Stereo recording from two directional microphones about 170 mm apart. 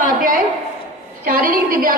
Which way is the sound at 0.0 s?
55° right (ahead or behind).